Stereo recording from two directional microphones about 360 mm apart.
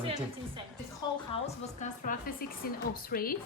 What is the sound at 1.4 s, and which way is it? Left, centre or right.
A woman's voice, centre.